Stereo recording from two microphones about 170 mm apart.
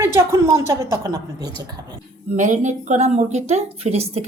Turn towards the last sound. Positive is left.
turn(degrees=-40)  # may be behind; listen again after turning